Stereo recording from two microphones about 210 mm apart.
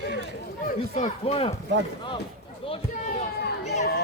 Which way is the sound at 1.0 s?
30° left (ahead or behind).